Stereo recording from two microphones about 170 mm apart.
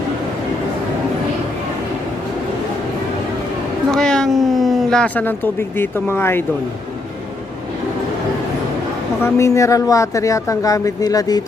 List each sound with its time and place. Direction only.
3.9 s speech: 5° left (ahead or behind)
9.2 s speech: 15° left (ahead or behind)